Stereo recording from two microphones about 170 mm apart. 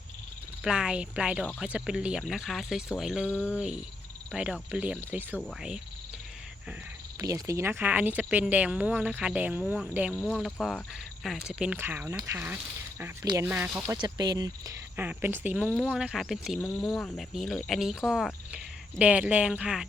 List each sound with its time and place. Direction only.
0.6 s speech: 5° right (ahead or behind)
7.2 s speech: 20° right (ahead or behind)
10.1 s speech: 5° left (ahead or behind); by 13.7 s 15° right (ahead or behind)
13.8 s speech: 25° right (ahead or behind); by 19.9 s 5° right (ahead or behind)